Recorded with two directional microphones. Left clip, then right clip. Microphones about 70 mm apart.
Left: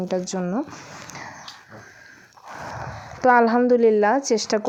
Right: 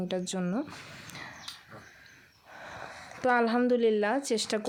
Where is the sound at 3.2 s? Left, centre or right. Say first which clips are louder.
Left 10 dB; left.